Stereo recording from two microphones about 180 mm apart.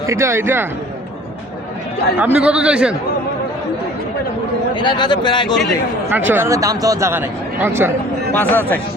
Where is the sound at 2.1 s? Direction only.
10° right (ahead or behind).